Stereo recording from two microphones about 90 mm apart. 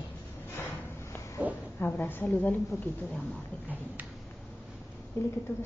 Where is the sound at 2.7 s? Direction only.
35° left (ahead or behind).